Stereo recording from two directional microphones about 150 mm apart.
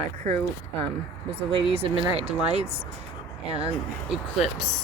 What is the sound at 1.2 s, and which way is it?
Speech, 40° right (ahead or behind).